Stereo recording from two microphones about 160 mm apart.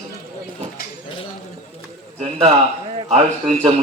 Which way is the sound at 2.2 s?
40° right (ahead or behind).